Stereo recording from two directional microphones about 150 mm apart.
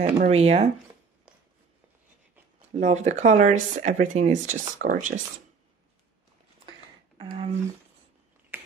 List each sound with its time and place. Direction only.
0.2 s speech: 45° right (ahead or behind)
2.7 s speech: 50° right (ahead or behind)
7.2 s speech: 45° right (ahead or behind)